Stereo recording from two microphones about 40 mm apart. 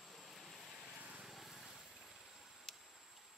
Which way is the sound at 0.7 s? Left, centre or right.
Centre.